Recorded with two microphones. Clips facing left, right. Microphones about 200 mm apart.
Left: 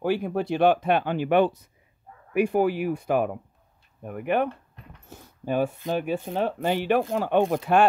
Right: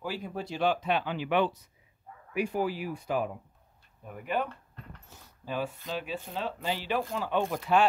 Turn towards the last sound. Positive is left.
turn(degrees=55)  # may be behind; listen again after turning